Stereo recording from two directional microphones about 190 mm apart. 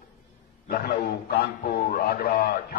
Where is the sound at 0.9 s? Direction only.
50° left (ahead or behind).